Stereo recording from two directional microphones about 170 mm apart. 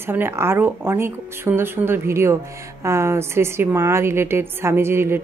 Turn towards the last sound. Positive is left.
turn(degrees=-15)  # may be behind; listen again after turning